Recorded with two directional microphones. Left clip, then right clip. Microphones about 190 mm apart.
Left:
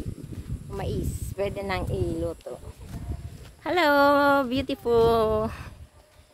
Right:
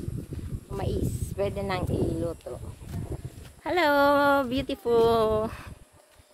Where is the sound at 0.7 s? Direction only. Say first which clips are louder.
Right 1 dB; centre (ahead or behind).